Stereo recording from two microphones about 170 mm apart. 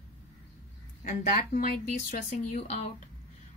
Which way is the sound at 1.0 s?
50° left (ahead or behind).